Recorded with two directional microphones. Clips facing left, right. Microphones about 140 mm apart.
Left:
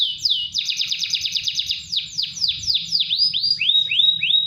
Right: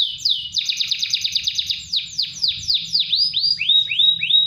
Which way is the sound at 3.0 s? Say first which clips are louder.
Even; 10° left (ahead or behind).